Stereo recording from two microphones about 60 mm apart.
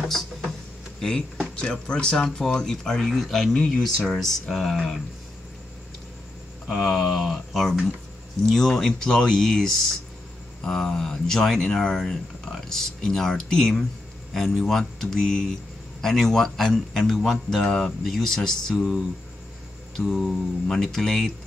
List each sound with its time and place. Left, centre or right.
1.0 s a man's voice: centre
6.7 s a man's voice: centre
17.6 s speech: centre
18.0 s speech: centre
20.0 s a man's voice: centre